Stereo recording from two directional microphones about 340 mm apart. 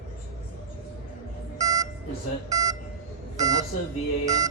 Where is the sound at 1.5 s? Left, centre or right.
Centre.